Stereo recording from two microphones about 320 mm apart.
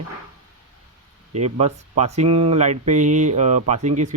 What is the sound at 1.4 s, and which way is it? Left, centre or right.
Speech, centre.